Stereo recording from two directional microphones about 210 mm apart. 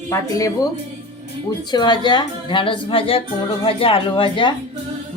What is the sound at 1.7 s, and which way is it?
A woman's voice, 20° left (ahead or behind).